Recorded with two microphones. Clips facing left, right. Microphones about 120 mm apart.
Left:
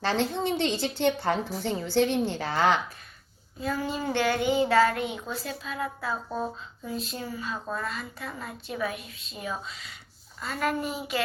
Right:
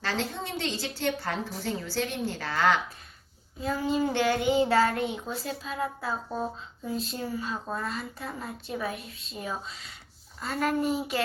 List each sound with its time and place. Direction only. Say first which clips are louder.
0.0 s a woman's voice: left 5 dB; 25° left (ahead or behind)
3.6 s child singing: right 3 dB; 25° right (ahead or behind)
4.5 s a woman's voice: left 3 dB; 30° right (ahead or behind)